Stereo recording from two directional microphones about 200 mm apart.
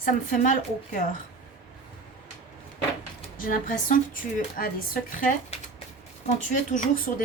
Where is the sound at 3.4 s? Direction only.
40° left (ahead or behind).